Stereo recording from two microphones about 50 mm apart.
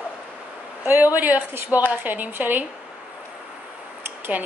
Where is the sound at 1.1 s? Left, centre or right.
Right.